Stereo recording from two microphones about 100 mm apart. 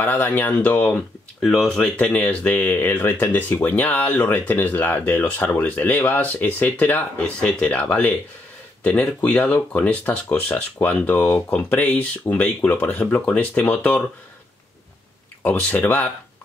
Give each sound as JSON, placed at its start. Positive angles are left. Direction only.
{"t": 0.0, "sound": "speech", "side_deg": 15}
{"t": 1.4, "sound": "speech", "side_deg": 0}
{"t": 15.4, "sound": "speech", "side_deg": 20}